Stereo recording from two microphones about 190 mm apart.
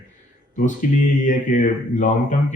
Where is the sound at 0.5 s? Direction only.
40° left (ahead or behind).